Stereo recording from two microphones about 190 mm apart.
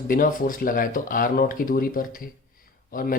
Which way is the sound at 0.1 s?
45° left (ahead or behind).